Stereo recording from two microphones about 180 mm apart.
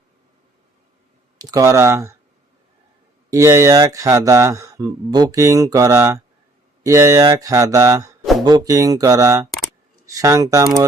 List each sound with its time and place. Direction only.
1.4 s speech: 20° right (ahead or behind)
3.2 s speech: 15° right (ahead or behind)
8.2 s a sound: centre (ahead or behind)
8.4 s speech: 20° right (ahead or behind)